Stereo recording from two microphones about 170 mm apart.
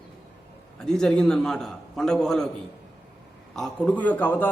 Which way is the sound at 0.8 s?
5° left (ahead or behind).